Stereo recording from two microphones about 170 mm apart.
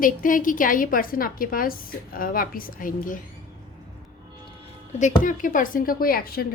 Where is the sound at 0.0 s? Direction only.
55° left (ahead or behind).